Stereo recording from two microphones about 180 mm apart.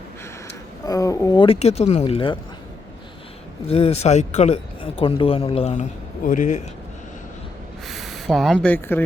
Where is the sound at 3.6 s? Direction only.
35° left (ahead or behind).